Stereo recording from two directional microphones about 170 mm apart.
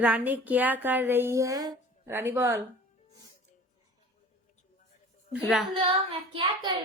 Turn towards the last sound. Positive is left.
turn(degrees=-25)  # may be behind; listen again after turning